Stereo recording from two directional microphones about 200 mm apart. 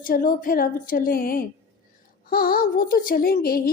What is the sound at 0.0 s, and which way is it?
Speech, 45° left (ahead or behind).